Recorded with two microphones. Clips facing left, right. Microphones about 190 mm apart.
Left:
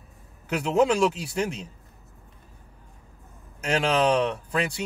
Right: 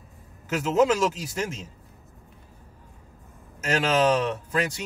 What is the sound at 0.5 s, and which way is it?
Speech, 40° right (ahead or behind).